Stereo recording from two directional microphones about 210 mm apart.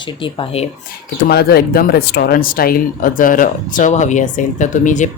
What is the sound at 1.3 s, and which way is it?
Speech, 50° left (ahead or behind).